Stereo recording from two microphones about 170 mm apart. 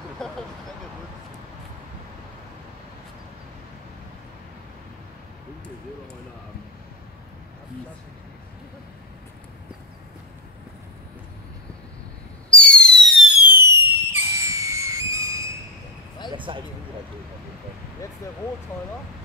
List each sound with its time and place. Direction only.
0.2 s vehicle: 5° left (ahead or behind)
12.4 s fireworks: 5° left (ahead or behind); by 15.4 s 20° right (ahead or behind)
16.3 s a sound: 30° right (ahead or behind)